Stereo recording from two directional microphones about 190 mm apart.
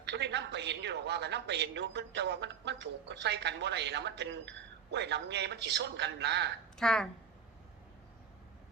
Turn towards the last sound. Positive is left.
turn(degrees=5)  # may be behind; listen again after turning